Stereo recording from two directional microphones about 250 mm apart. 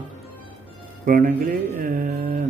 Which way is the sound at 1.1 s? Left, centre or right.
Right.